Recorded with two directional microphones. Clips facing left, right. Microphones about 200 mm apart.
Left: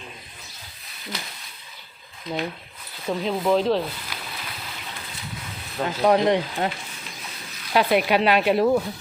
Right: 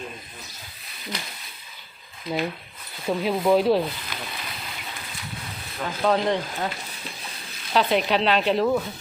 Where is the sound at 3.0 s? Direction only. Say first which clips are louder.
Right 1 dB; 5° right (ahead or behind).